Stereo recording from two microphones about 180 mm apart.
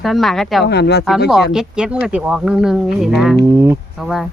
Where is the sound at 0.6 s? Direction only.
70° left (ahead or behind).